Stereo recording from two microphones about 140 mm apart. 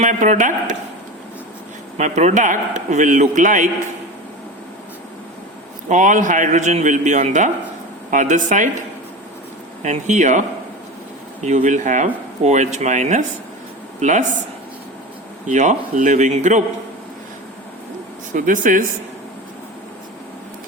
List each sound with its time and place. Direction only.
0.0 s speech: 60° right (ahead or behind)
2.0 s speech: 55° right (ahead or behind)
5.9 s speech: 60° right (ahead or behind)
9.8 s speech: 60° right (ahead or behind)
11.4 s speech: 60° right (ahead or behind)
15.4 s speech: 60° right (ahead or behind)
18.3 s speech: 70° right (ahead or behind)